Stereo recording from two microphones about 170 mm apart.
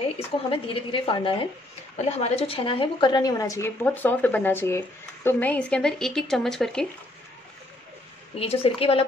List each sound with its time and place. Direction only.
0.5 s a woman's voice: 30° left (ahead or behind); by 6.9 s 5° left (ahead or behind)
8.4 s a woman's voice: 35° left (ahead or behind)